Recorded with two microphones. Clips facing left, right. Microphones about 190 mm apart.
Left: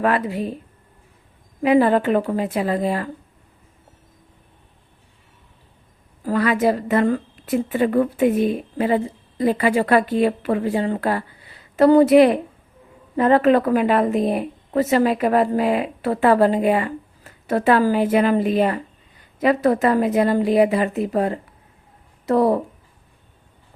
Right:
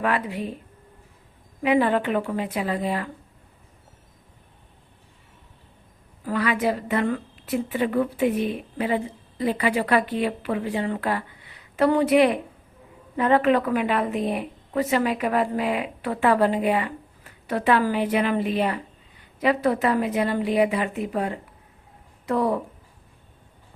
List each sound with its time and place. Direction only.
0.0 s a woman's voice: 40° left (ahead or behind)
1.6 s a woman's voice: 40° left (ahead or behind)
6.2 s a woman's voice: 40° left (ahead or behind)